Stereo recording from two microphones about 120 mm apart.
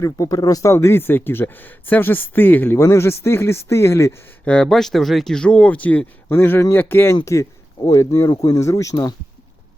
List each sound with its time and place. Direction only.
0.0 s speech: 30° left (ahead or behind)
4.4 s speech: 5° left (ahead or behind); by 9.1 s 25° left (ahead or behind)